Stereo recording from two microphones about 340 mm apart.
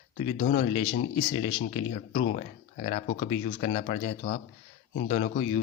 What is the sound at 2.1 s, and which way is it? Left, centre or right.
Speech, left.